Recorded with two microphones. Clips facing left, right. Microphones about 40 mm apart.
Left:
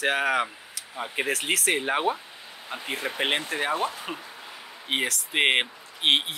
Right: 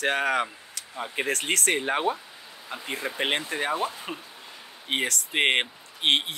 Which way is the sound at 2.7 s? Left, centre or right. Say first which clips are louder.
Left 1 dB; centre.